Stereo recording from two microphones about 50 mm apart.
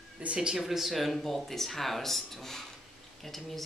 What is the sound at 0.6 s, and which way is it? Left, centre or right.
Speech, centre.